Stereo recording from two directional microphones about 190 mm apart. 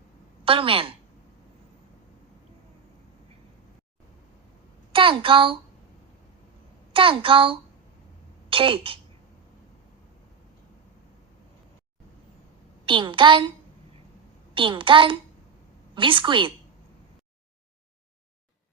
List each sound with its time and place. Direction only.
0.4 s a woman's voice: 30° right (ahead or behind)
4.9 s a woman's voice: 25° right (ahead or behind)
6.9 s a woman's voice: 30° right (ahead or behind)
12.8 s a child's voice: 25° right (ahead or behind)
14.5 s a woman's voice: 25° right (ahead or behind)